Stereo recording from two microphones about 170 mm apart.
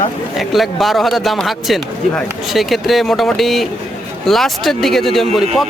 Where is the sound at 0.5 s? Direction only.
Centre (ahead or behind).